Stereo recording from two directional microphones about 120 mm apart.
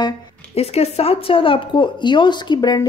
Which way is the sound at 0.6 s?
60° left (ahead or behind).